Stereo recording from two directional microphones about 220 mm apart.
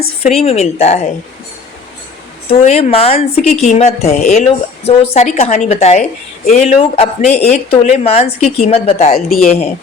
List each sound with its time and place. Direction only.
0.2 s a woman's voice: 30° left (ahead or behind)
2.5 s a woman's voice: 30° left (ahead or behind)